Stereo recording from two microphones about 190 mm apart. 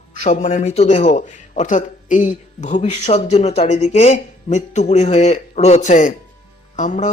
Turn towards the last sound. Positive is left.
turn(degrees=40)  # may be behind; listen again after turning